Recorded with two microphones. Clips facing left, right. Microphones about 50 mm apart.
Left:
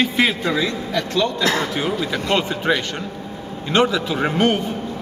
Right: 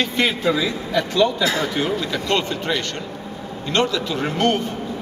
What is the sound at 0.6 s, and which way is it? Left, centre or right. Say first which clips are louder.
Speech: right 1 dB; centre.